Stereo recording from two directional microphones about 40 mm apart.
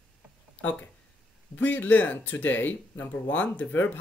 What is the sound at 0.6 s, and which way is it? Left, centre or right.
Speech, left.